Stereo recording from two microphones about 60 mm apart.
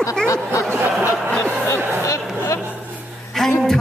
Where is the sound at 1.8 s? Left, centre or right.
Right.